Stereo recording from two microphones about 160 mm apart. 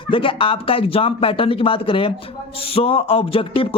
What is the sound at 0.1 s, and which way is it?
A man's voice, 35° left (ahead or behind).